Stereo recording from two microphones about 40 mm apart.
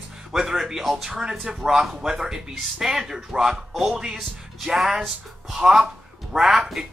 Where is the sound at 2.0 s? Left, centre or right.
Centre.